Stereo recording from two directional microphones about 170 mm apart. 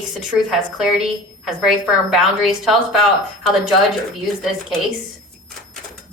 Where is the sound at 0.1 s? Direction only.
Centre (ahead or behind).